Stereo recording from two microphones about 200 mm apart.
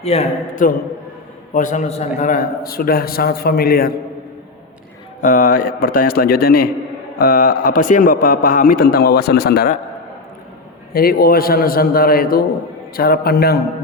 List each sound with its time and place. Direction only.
0.0 s a man's voice: 30° left (ahead or behind); by 3.9 s 50° left (ahead or behind)
5.2 s a man's voice: 45° left (ahead or behind)
10.9 s a man's voice: 50° left (ahead or behind)